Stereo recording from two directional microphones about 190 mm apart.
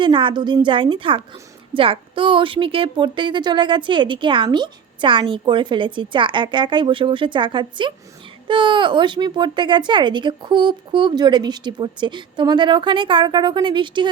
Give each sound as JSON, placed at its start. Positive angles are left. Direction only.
{"t": 0.0, "sound": "a woman's voice", "side_deg": -25}